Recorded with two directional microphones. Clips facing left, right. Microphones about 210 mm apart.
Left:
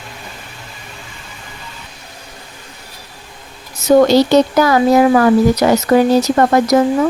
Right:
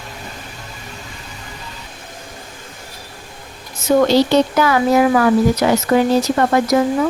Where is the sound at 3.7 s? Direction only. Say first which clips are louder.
Left 4 dB; 40° left (ahead or behind).